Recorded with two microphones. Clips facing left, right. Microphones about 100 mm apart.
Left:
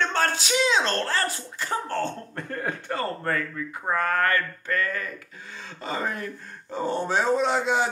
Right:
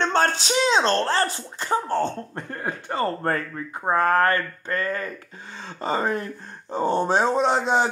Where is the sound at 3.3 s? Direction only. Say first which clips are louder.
Right 2 dB; 35° right (ahead or behind).